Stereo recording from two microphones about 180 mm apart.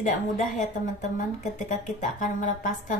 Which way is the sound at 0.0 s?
45° left (ahead or behind).